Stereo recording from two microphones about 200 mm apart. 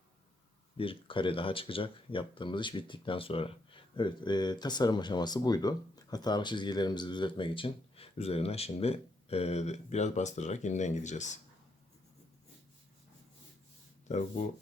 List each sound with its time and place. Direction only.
0.8 s speech: 25° left (ahead or behind)
14.1 s speech: 35° left (ahead or behind)